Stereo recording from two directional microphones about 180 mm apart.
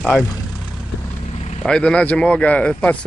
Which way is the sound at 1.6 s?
5° left (ahead or behind).